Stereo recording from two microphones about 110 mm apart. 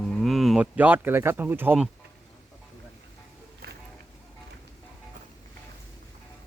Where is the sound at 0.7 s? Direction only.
15° right (ahead or behind).